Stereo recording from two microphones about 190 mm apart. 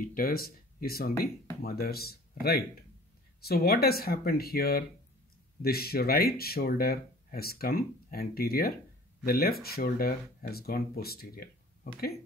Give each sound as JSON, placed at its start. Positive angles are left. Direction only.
{"t": 0.0, "sound": "speech", "side_deg": 50}